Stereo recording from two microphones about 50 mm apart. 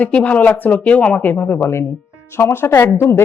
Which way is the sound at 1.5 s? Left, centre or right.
Left.